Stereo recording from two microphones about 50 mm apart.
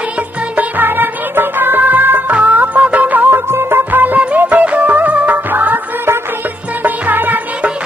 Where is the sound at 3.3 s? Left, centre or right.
Right.